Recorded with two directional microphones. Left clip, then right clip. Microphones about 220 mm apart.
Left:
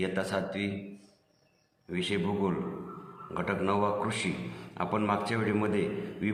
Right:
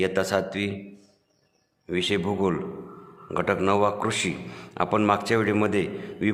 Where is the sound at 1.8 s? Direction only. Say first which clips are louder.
Right 7 dB; 50° right (ahead or behind).